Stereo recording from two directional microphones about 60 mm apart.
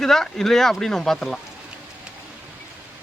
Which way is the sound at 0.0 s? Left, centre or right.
Centre.